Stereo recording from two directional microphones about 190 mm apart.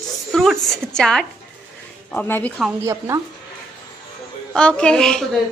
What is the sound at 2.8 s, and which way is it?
Speech, 15° right (ahead or behind).